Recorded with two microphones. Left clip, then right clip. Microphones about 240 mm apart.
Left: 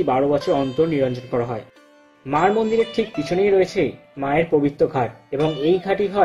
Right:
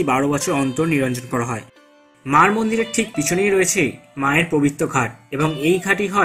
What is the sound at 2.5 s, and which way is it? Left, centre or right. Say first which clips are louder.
Speech: left 2 dB; centre.